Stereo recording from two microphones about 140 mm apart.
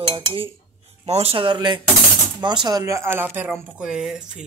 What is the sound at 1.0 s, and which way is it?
A man's voice, 45° right (ahead or behind).